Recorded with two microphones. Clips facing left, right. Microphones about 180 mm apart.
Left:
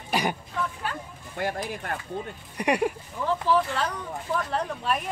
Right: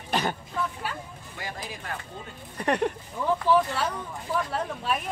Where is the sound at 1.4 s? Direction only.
55° left (ahead or behind).